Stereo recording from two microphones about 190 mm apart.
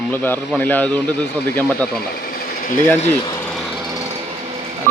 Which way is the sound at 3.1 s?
10° left (ahead or behind).